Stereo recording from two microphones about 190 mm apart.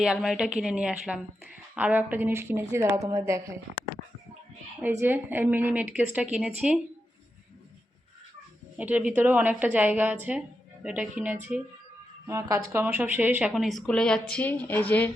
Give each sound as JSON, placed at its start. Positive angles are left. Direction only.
{"t": 0.0, "sound": "speech", "side_deg": -5}
{"t": 4.8, "sound": "speech", "side_deg": -10}
{"t": 8.8, "sound": "speech", "side_deg": -5}